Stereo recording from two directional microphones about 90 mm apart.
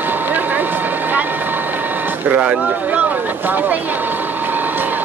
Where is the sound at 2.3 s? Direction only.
15° right (ahead or behind).